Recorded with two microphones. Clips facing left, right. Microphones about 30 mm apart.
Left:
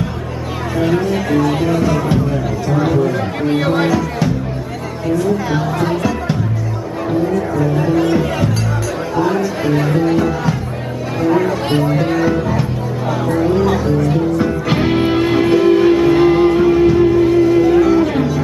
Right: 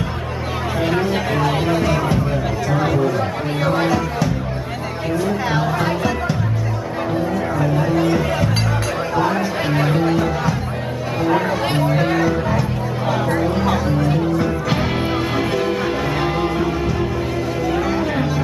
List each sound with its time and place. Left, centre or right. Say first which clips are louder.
0.7 s speech: left 4 dB; centre
3.1 s speech: left 4 dB; centre
5.1 s speech: left 3 dB; centre
7.3 s music: left 3 dB; centre
9.1 s speech: left 3 dB; centre
10.0 s speech: left 3 dB; centre
11.1 s chatter: left 4 dB; centre
11.8 s speech: even; centre
13.1 s music: left 4 dB; centre
14.7 s music: left 5 dB; centre